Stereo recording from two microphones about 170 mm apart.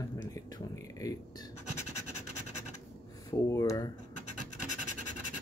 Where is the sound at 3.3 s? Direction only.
20° left (ahead or behind).